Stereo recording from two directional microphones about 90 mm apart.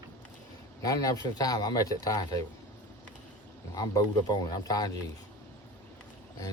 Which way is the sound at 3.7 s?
45° left (ahead or behind).